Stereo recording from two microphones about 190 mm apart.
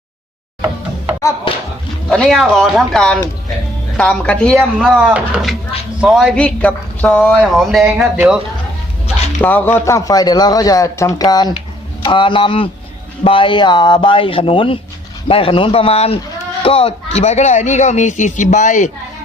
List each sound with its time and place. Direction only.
1.5 s speech: 30° left (ahead or behind)
2.0 s a man's voice: 5° left (ahead or behind)
9.4 s a man's voice: 10° left (ahead or behind); by 18.9 s 40° left (ahead or behind)